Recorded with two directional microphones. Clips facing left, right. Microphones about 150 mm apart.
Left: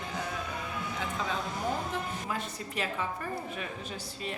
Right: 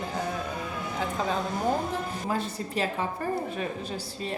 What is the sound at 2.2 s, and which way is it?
A woman's voice, 30° right (ahead or behind).